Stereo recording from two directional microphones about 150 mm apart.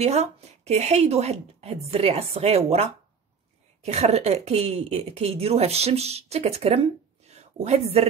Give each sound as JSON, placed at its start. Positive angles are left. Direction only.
{"t": 0.0, "sound": "a woman's voice", "side_deg": -45}